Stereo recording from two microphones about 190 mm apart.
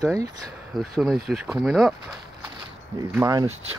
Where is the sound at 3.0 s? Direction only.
15° right (ahead or behind).